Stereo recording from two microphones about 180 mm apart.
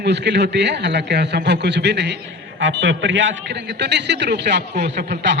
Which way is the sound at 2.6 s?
90° right.